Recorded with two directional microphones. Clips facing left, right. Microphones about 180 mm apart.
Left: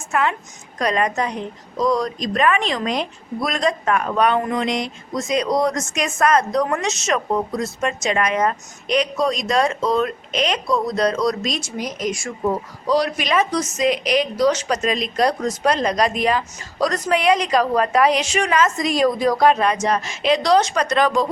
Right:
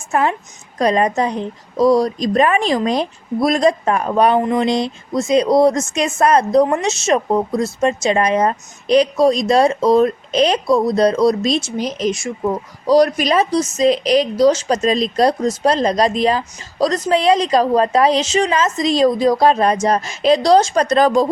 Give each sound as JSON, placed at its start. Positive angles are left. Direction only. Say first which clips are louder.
{"t": 0.1, "sound": "a woman's voice", "louder": "right 4 dB", "side_deg": -35}
{"t": 12.9, "sound": "a woman's voice", "louder": "right 6 dB", "side_deg": -40}